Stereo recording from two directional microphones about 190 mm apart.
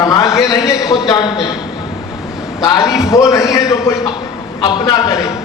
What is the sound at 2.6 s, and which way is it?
A man's voice, 20° left (ahead or behind).